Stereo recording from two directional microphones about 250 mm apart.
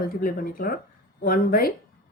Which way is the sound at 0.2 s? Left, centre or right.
Left.